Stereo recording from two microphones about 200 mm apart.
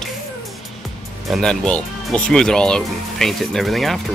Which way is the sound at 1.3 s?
5° left (ahead or behind).